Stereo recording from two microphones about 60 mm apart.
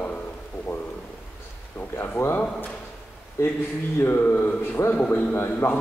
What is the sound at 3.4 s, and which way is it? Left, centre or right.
Speech, left.